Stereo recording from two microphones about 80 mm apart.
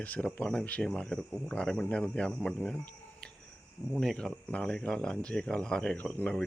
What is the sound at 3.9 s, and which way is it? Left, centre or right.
Speech, centre.